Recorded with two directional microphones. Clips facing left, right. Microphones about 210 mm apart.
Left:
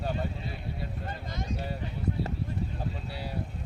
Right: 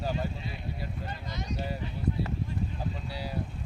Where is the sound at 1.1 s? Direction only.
50° left (ahead or behind).